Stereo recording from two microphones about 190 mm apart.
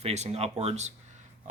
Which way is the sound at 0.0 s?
35° right (ahead or behind).